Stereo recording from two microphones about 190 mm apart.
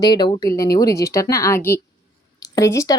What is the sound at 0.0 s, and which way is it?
Speech, 20° left (ahead or behind).